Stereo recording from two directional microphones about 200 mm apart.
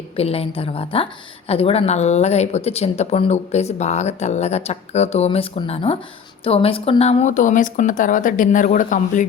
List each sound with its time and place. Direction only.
0.2 s a woman's voice: 30° left (ahead or behind)